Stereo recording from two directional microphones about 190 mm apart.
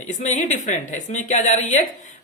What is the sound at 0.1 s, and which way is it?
Speech, 40° left (ahead or behind).